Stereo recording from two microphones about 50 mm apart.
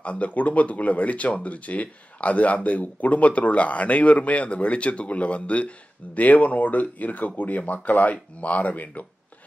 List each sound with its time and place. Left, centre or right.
0.0 s speech: left